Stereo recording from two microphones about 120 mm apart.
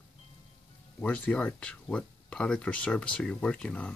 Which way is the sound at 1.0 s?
10° left (ahead or behind).